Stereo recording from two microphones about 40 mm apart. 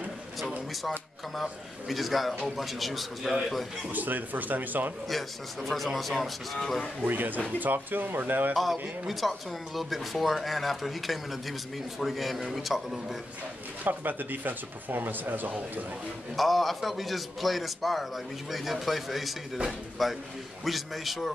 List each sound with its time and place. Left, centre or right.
0.8 s a man's voice: centre
3.9 s speech: right
5.0 s a man's voice: centre
7.1 s speech: right
9.0 s a man's voice: centre
13.8 s speech: right
16.3 s a man's voice: centre